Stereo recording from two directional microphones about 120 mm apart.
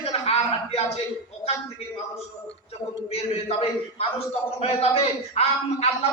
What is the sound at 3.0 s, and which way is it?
Speech, 55° left (ahead or behind).